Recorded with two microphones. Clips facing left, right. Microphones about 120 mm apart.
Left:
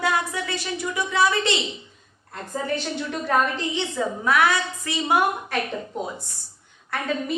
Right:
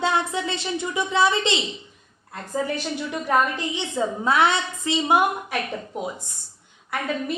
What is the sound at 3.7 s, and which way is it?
A woman's voice, 20° right (ahead or behind).